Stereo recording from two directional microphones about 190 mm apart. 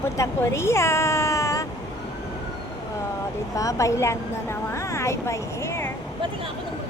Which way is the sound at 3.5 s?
15° left (ahead or behind).